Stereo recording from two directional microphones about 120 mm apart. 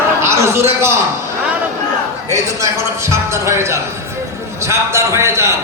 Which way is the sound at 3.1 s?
25° right (ahead or behind).